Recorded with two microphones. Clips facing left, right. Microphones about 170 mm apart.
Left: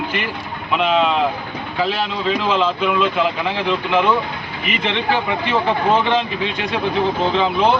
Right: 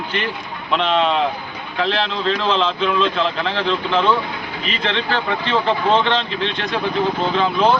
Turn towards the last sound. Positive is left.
turn(degrees=15)  # may be behind; listen again after turning